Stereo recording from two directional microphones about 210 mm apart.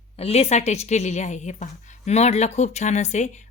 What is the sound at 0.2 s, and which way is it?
A woman's voice, 30° left (ahead or behind).